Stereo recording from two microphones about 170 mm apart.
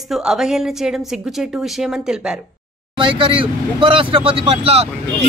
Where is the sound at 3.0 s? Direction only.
30° right (ahead or behind).